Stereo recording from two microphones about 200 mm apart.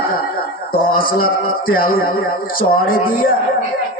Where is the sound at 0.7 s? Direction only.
45° left (ahead or behind).